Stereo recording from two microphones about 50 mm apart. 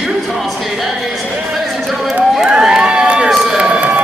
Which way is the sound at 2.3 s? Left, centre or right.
Centre.